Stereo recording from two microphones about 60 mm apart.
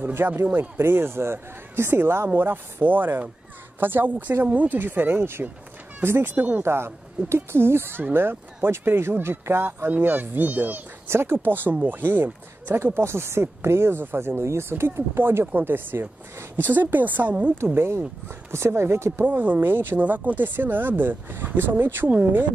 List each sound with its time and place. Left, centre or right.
0.0 s a man's voice: right
6.6 s speech: right
11.1 s speech: right
17.7 s speech: right
19.2 s speech: right